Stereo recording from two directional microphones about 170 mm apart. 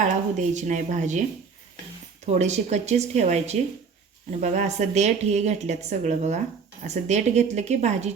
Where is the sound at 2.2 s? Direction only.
40° right (ahead or behind).